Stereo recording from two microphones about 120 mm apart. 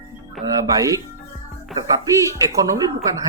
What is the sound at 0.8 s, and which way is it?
Speech, 25° right (ahead or behind).